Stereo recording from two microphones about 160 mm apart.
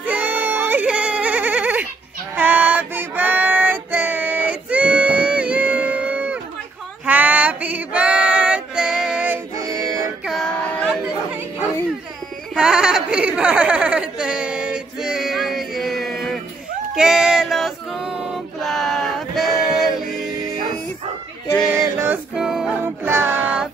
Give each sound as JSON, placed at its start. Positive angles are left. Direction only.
{"t": 0.0, "sound": "a sound", "side_deg": -10}
{"t": 2.3, "sound": "child singing", "side_deg": -10}
{"t": 7.1, "sound": "female singing", "side_deg": -10}
{"t": 9.6, "sound": "music", "side_deg": -20}
{"t": 10.2, "sound": "music", "side_deg": 0}
{"t": 12.5, "sound": "a sound", "side_deg": -5}
{"t": 21.6, "sound": "music", "side_deg": -15}
{"t": 22.8, "sound": "music", "side_deg": -15}